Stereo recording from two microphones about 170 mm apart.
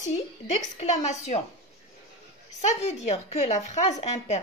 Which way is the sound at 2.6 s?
40° left (ahead or behind).